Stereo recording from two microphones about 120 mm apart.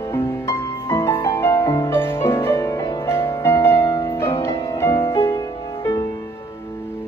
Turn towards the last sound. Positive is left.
turn(degrees=30)  # may be behind; listen again after turning